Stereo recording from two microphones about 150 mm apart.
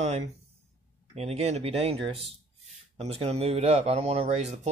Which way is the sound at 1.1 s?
45° right (ahead or behind).